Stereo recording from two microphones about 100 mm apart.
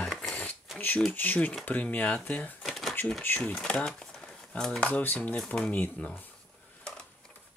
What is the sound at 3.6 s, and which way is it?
Speech, 10° left (ahead or behind).